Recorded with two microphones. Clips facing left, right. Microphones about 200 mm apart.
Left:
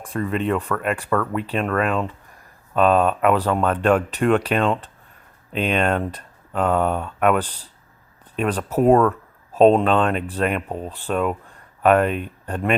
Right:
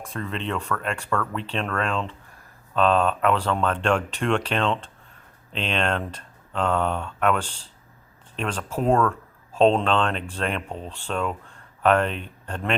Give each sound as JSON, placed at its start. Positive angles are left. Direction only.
{"t": 0.2, "sound": "speech", "side_deg": 10}